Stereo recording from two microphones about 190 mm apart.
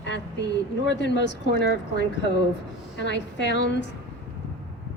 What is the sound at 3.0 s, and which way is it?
Speech, 65° left (ahead or behind).